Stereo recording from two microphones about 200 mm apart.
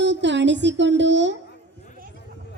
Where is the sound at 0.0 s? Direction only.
60° right (ahead or behind).